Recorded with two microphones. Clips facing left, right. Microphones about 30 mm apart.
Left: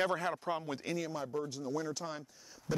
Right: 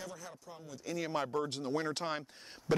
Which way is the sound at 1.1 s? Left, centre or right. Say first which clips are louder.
Right 3 dB; right.